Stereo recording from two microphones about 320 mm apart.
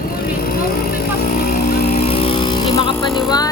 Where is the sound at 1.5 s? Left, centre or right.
Left.